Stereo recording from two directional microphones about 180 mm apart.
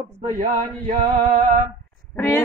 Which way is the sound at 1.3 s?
45° right (ahead or behind).